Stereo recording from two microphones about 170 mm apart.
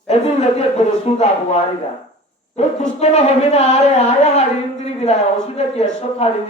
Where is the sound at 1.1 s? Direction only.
35° left (ahead or behind).